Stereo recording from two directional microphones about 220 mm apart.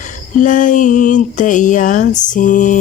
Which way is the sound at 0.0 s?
35° left (ahead or behind).